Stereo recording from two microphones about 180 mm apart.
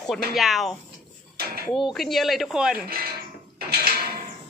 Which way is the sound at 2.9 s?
60° right (ahead or behind).